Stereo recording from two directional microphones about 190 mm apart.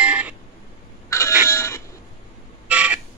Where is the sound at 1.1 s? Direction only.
15° left (ahead or behind).